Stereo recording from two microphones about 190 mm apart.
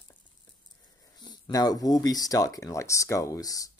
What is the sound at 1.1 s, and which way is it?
Speech, 20° left (ahead or behind).